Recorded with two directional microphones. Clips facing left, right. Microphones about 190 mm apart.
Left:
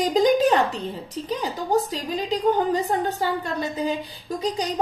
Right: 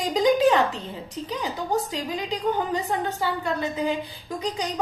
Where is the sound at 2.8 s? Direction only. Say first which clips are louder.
Left 2 dB; 40° left (ahead or behind).